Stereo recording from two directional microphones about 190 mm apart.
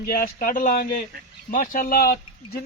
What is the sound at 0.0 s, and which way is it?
Speech, 50° left (ahead or behind).